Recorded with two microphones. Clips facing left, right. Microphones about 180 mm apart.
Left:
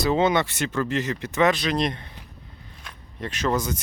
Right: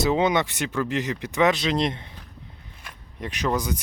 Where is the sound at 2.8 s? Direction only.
15° right (ahead or behind).